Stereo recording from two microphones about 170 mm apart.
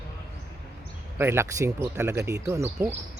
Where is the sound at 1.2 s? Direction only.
15° right (ahead or behind).